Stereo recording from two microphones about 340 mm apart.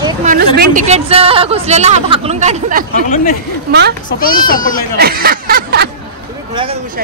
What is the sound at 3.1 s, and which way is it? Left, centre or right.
Speech, left.